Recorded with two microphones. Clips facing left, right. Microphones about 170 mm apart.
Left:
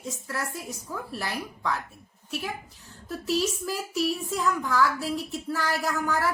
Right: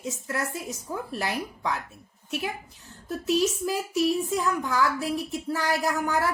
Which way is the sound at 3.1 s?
15° right (ahead or behind).